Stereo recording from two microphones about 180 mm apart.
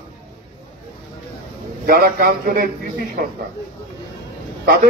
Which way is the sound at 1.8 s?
55° right (ahead or behind).